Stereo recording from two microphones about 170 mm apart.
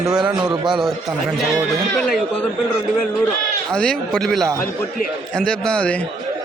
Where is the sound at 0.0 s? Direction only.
5° right (ahead or behind).